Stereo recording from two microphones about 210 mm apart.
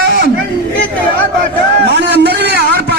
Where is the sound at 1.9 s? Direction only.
55° right (ahead or behind).